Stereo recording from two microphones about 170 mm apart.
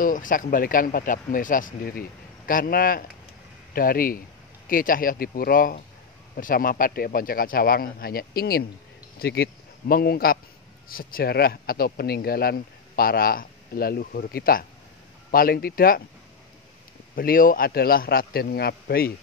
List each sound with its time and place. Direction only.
0.0 s a man's voice: 50° left (ahead or behind)
17.1 s a man's voice: 55° left (ahead or behind)